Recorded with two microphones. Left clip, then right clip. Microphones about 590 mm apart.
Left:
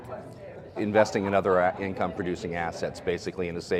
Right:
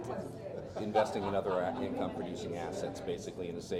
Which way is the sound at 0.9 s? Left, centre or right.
Left.